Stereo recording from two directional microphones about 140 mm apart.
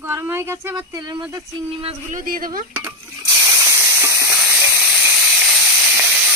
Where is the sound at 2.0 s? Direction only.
75° right (ahead or behind).